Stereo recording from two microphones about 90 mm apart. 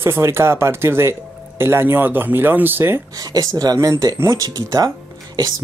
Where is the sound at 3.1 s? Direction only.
45° right (ahead or behind).